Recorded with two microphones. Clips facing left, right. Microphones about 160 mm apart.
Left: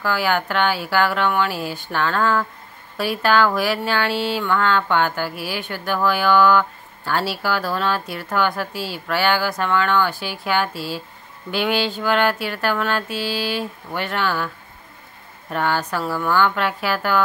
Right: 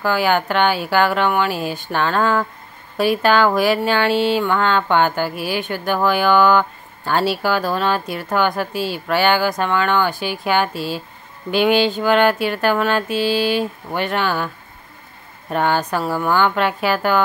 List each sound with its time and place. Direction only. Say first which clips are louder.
0.0 s a woman's voice: right 3 dB; 20° right (ahead or behind)
15.5 s a woman's voice: right 3 dB; 20° right (ahead or behind)
16.0 s a woman's voice: right 3 dB; 45° right (ahead or behind)
16.3 s a woman's voice: right 2 dB; 20° right (ahead or behind)